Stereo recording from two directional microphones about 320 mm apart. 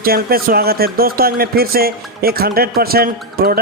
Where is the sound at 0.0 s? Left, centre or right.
Right.